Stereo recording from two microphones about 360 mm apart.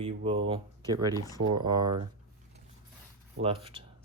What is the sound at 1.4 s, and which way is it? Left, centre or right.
Speech, centre.